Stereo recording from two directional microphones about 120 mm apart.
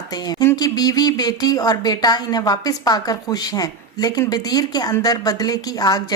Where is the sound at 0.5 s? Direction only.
30° left (ahead or behind).